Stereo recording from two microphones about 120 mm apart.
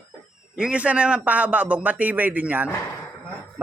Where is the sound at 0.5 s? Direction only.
10° right (ahead or behind).